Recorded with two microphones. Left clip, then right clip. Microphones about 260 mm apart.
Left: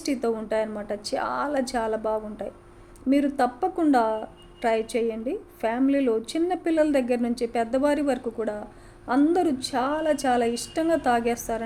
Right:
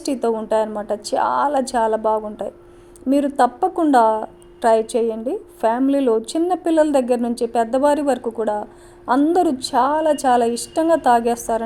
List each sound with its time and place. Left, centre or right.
0.2 s a woman's voice: centre